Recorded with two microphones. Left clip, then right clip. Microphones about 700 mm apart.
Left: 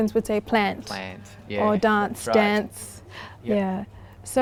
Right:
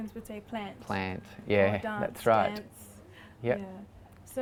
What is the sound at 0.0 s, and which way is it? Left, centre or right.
Speech, left.